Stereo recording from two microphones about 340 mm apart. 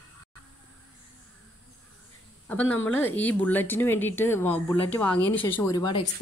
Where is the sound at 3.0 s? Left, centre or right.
Centre.